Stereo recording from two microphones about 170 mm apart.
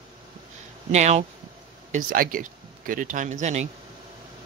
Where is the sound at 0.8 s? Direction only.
40° right (ahead or behind).